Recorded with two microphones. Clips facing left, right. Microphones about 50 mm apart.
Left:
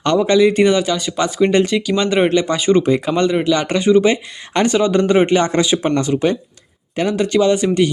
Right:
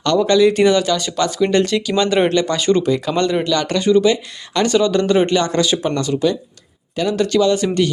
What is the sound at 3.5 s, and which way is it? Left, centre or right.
Speech, left.